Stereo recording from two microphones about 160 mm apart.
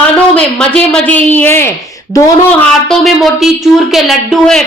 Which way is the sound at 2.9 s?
Centre (ahead or behind).